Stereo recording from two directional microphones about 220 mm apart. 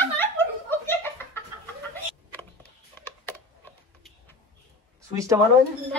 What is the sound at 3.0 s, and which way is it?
Typing, 10° left (ahead or behind).